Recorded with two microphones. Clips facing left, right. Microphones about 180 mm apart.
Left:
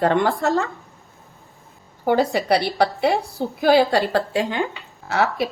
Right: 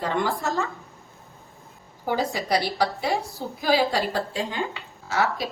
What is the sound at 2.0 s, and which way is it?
A woman's voice, 65° left (ahead or behind).